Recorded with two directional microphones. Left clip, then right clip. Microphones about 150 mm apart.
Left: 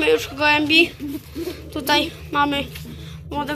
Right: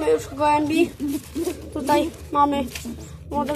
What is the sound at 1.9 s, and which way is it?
Speech, 15° right (ahead or behind).